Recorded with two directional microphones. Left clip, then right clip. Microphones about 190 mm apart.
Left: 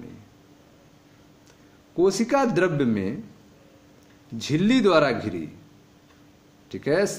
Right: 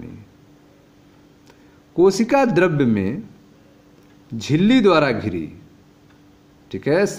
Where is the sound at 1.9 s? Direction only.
30° right (ahead or behind).